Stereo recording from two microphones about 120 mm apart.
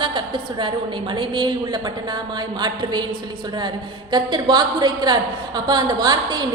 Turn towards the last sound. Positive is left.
turn(degrees=-35)  # may be behind; listen again after turning